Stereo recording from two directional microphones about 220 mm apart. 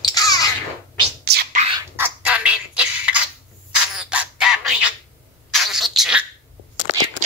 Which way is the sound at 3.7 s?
5° right (ahead or behind).